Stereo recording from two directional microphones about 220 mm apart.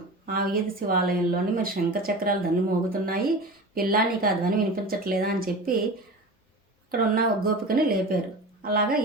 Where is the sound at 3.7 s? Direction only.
40° right (ahead or behind).